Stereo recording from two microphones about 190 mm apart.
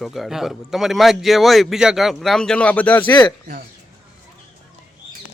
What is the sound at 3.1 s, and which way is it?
Speech, 20° left (ahead or behind).